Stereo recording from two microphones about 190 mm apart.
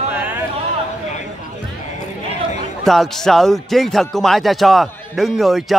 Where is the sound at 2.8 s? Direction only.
Centre (ahead or behind).